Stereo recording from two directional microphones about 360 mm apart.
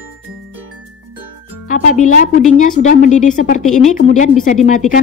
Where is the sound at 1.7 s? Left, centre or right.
Left.